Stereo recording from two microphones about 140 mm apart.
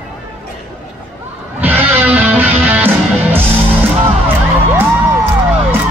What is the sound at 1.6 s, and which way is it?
Music, 15° right (ahead or behind).